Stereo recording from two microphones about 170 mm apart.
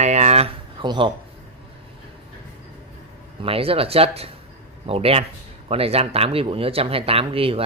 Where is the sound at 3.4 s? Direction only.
35° right (ahead or behind).